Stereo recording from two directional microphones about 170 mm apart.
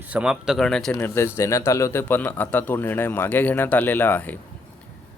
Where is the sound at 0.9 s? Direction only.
15° left (ahead or behind).